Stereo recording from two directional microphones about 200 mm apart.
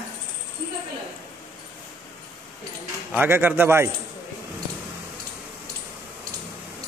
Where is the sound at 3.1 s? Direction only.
10° right (ahead or behind).